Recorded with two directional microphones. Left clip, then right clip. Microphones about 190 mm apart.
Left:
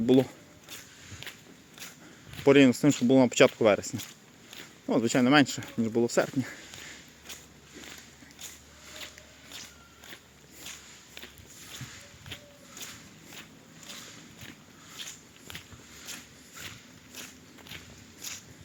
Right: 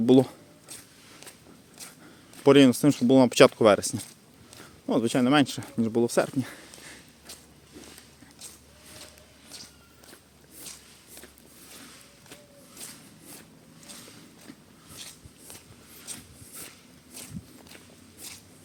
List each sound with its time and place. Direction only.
0.0 s speech: 25° right (ahead or behind)
2.4 s speech: 25° right (ahead or behind)
3.3 s speech: 35° right (ahead or behind)
4.9 s speech: 10° right (ahead or behind)
15.0 s walk: centre (ahead or behind)
18.2 s a sound: centre (ahead or behind)